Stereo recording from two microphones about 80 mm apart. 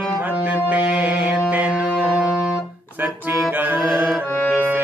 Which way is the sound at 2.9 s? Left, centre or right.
Right.